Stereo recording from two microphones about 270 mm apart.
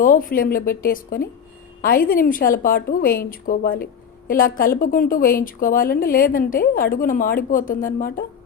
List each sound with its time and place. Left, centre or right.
0.0 s a woman's voice: left